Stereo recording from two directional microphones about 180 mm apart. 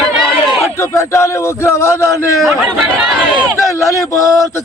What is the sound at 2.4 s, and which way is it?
Speech, 5° right (ahead or behind).